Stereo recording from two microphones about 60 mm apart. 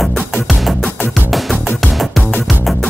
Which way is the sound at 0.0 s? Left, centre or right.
Centre.